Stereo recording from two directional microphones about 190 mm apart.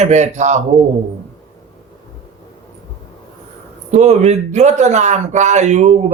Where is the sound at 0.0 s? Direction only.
40° right (ahead or behind).